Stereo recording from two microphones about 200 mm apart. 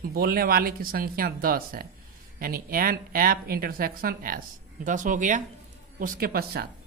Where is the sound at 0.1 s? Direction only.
50° right (ahead or behind).